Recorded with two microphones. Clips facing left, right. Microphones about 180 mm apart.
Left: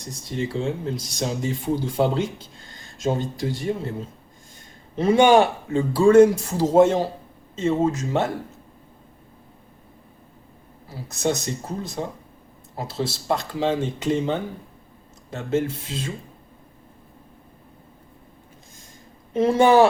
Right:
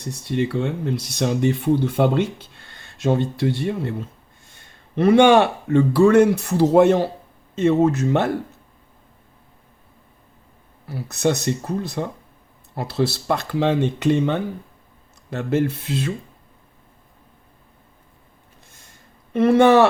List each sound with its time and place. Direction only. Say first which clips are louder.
0.0 s speech: right 5 dB; 65° right (ahead or behind)
10.8 s speech: right 3 dB; 65° right (ahead or behind)
19.3 s speech: right 3 dB; 65° right (ahead or behind)